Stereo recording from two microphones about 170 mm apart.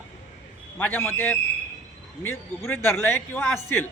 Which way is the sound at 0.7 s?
10° left (ahead or behind).